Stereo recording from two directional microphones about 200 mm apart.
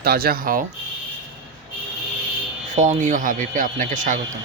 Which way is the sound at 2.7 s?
35° right (ahead or behind).